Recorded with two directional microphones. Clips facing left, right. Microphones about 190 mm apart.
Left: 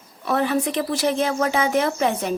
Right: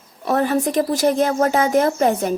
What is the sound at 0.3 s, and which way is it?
Speech, 45° right (ahead or behind).